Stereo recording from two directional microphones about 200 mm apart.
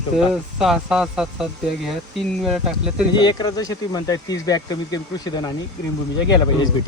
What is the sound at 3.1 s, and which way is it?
Speech, 20° left (ahead or behind).